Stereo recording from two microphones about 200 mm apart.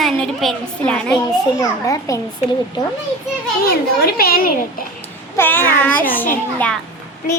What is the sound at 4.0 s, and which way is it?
Speech, 50° left (ahead or behind).